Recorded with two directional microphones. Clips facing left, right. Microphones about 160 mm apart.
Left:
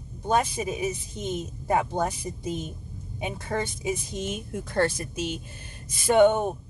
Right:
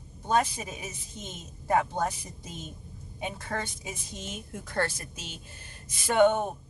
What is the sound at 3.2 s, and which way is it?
Speech, 15° left (ahead or behind).